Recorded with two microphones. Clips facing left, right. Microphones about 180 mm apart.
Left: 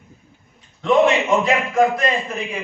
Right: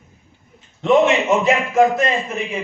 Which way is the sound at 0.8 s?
25° right (ahead or behind).